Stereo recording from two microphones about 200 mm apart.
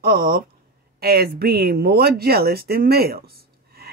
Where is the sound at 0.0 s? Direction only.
45° right (ahead or behind).